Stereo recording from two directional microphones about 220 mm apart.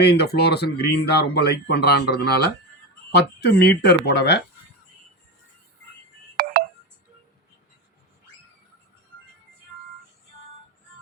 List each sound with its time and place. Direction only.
0.0 s speech: 50° left (ahead or behind)
6.3 s telephone dialing: 45° right (ahead or behind)